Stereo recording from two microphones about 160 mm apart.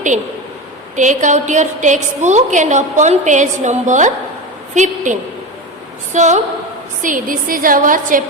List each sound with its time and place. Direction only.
0.9 s a woman's voice: 50° right (ahead or behind)
6.1 s a woman's voice: 45° right (ahead or behind)
7.0 s a woman's voice: 60° right (ahead or behind)